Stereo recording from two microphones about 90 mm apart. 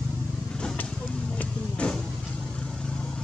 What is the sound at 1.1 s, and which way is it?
Vehicle, 10° left (ahead or behind).